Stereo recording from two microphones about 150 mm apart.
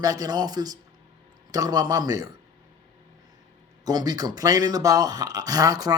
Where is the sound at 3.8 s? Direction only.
25° right (ahead or behind).